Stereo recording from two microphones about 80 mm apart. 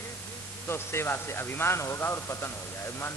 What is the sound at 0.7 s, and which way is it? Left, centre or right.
A man's voice, left.